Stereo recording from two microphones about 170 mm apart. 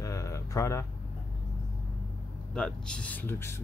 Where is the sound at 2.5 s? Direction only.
5° left (ahead or behind).